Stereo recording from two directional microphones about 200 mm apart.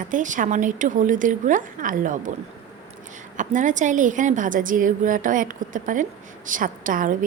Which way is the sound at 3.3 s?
40° right (ahead or behind).